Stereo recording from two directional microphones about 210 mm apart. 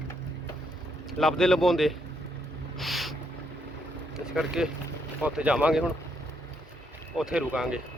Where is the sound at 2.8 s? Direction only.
Centre (ahead or behind).